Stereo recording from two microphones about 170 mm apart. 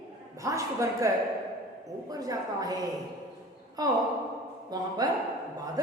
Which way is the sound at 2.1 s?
20° right (ahead or behind).